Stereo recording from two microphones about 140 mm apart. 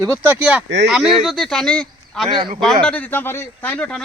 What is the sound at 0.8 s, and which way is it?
Speech, centre (ahead or behind).